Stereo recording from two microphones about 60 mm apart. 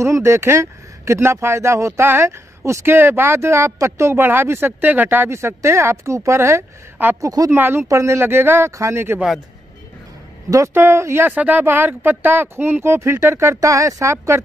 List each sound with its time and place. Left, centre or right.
0.0 s a woman's voice: right
2.8 s speech: right
5.3 s speech: right
7.2 s speech: right
7.5 s speech: right
7.9 s speech: right
8.3 s speech: right
8.7 s speech: right
10.7 s speech: right
11.0 s speech: right
11.2 s speech: right
14.1 s speech: right